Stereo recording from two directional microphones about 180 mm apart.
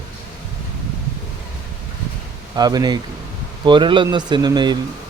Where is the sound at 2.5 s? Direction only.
20° right (ahead or behind).